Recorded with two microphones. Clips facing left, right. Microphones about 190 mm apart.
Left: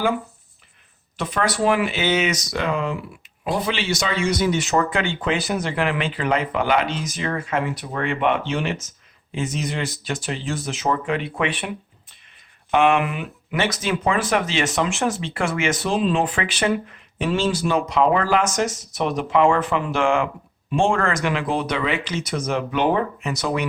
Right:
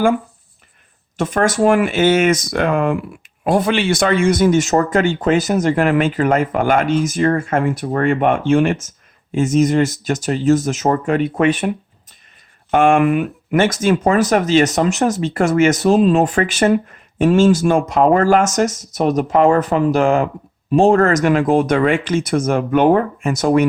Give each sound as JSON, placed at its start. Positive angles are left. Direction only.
{"t": 1.1, "sound": "speech", "side_deg": -45}
{"t": 12.7, "sound": "speech", "side_deg": -45}